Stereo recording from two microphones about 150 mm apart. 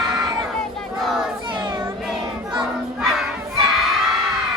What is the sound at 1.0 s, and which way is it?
Child singing, centre (ahead or behind).